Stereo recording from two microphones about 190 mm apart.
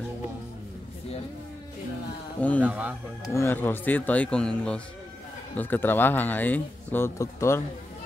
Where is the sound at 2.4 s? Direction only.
5° left (ahead or behind).